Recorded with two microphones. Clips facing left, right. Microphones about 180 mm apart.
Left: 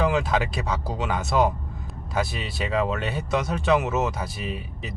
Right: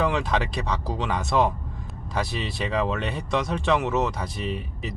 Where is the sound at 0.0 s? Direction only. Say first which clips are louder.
Left 1 dB; centre (ahead or behind).